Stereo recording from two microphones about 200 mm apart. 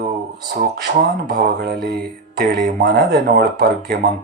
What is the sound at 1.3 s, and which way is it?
Speech, 55° right (ahead or behind).